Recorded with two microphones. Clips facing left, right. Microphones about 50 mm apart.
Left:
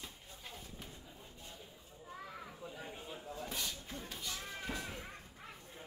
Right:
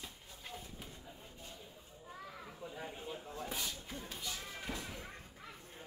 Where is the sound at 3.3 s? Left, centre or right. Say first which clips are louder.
Left 1 dB; right.